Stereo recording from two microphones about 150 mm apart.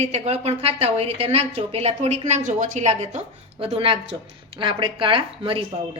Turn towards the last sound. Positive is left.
turn(degrees=-40)  # may be behind; listen again after turning